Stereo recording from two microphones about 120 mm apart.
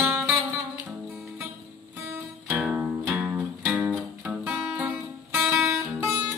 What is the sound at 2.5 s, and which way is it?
Music, 5° right (ahead or behind).